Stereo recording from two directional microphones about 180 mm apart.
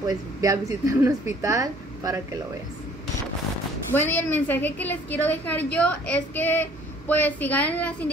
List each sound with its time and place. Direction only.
0.0 s speech: 20° right (ahead or behind)
3.9 s a woman's voice: 10° left (ahead or behind)